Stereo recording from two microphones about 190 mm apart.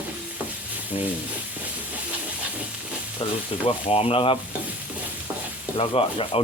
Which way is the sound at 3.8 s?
30° left (ahead or behind).